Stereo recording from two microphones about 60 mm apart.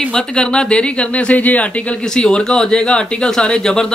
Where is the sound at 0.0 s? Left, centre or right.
Centre.